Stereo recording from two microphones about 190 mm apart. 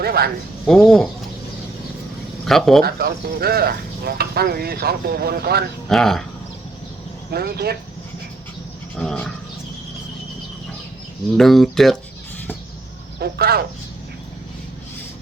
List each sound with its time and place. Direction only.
0.0 s a sound: 55° right (ahead or behind)
0.7 s speech: 5° left (ahead or behind)
2.4 s speech: centre (ahead or behind)
2.8 s speech: 60° right (ahead or behind)
5.9 s speech: centre (ahead or behind)
7.3 s speech: 55° right (ahead or behind)
9.0 s speech: 5° left (ahead or behind)
11.3 s speech: centre (ahead or behind)
13.1 s speech: 55° right (ahead or behind)